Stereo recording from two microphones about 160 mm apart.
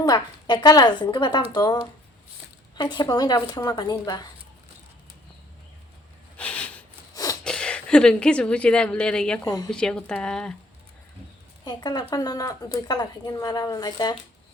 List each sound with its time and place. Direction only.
0.0 s speech: 25° left (ahead or behind)
6.3 s snort: 5° left (ahead or behind)
7.1 s a sound: 20° left (ahead or behind)
7.4 s a woman's voice: 5° left (ahead or behind)
9.4 s speech: 25° left (ahead or behind)
9.7 s speech: 5° left (ahead or behind)
11.6 s a woman's voice: 25° left (ahead or behind)